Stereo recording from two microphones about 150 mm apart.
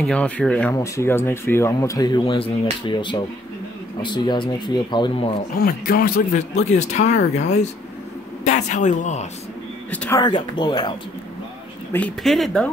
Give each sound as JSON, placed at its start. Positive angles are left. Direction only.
{"t": 0.0, "sound": "speech", "side_deg": 5}
{"t": 0.7, "sound": "speech", "side_deg": 20}
{"t": 5.6, "sound": "speech", "side_deg": 80}
{"t": 6.5, "sound": "speech", "side_deg": 50}
{"t": 9.8, "sound": "speech", "side_deg": 10}
{"t": 10.1, "sound": "speech", "side_deg": 30}
{"t": 11.9, "sound": "speech", "side_deg": 5}